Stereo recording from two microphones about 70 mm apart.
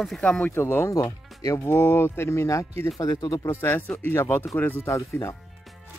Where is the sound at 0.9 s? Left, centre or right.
Left.